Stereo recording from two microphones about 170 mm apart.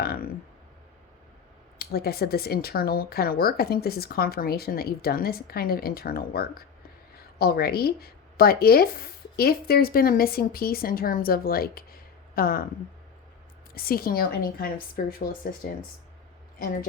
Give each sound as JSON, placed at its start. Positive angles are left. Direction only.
{"t": 0.0, "sound": "a sound", "side_deg": 60}
{"t": 1.8, "sound": "speech", "side_deg": 65}
{"t": 13.7, "sound": "speech", "side_deg": 60}